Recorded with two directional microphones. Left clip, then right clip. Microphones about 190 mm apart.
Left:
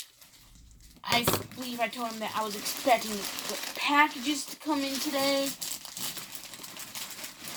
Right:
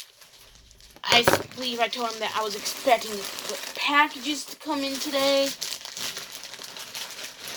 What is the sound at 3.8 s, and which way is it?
Speech, 15° right (ahead or behind).